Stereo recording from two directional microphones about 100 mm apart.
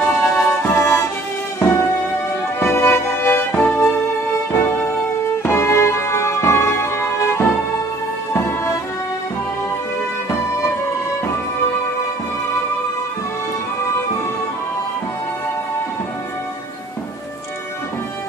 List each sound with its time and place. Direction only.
0.4 s music: 20° left (ahead or behind)